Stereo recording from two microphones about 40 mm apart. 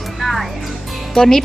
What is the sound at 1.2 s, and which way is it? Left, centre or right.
Speech, centre.